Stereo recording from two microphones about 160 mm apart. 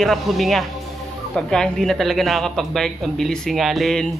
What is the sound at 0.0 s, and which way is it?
A man's voice, centre (ahead or behind).